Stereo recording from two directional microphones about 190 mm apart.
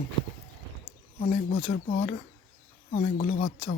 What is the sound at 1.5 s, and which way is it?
Speech, 35° left (ahead or behind).